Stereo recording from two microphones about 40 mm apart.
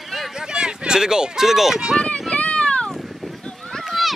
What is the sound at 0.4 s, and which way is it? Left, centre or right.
Speech, right.